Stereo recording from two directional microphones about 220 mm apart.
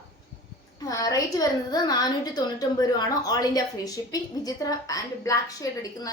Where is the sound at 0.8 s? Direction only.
15° left (ahead or behind).